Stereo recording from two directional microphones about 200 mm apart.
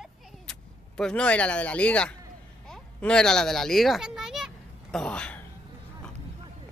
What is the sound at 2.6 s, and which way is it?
Children playing, 5° left (ahead or behind).